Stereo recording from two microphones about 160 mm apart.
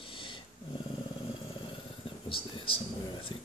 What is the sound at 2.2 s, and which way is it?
Speech, 35° left (ahead or behind).